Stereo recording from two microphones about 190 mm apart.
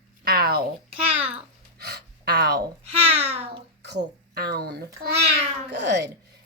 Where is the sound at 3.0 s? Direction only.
30° right (ahead or behind).